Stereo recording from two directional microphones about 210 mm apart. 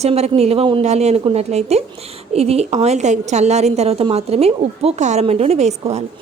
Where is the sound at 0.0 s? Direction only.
30° right (ahead or behind).